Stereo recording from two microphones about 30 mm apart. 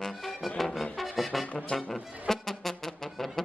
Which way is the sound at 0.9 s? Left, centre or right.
Centre.